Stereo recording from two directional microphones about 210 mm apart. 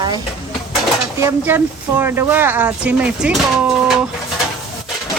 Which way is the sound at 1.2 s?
10° right (ahead or behind).